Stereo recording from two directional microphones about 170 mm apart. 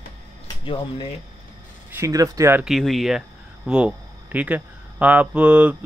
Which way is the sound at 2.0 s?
20° right (ahead or behind).